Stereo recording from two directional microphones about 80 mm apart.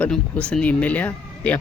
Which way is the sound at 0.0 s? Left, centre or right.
Centre.